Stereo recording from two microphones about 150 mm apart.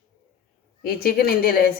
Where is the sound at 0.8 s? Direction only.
90° left.